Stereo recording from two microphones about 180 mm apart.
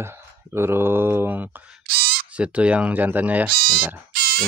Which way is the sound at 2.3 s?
5° right (ahead or behind).